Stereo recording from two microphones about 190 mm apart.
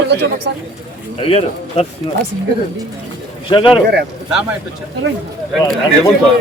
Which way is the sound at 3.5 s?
25° left (ahead or behind).